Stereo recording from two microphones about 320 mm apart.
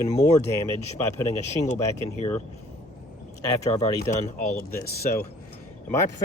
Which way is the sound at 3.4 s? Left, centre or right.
Centre.